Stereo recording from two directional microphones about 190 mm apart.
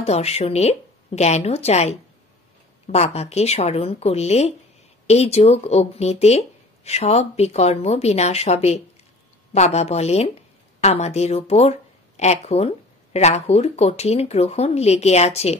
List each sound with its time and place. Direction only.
0.0 s speech: 35° left (ahead or behind)